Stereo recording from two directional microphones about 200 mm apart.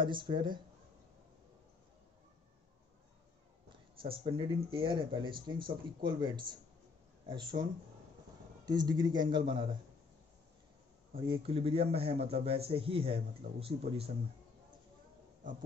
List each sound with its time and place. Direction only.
0.0 s speech: 25° right (ahead or behind)
4.0 s speech: 30° right (ahead or behind)
8.6 s speech: 20° right (ahead or behind)
11.1 s speech: 25° right (ahead or behind)